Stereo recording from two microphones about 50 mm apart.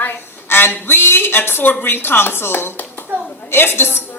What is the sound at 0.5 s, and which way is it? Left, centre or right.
A man's voice, left.